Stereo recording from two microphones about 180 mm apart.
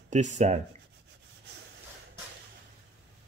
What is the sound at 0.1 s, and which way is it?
Speech, 40° right (ahead or behind).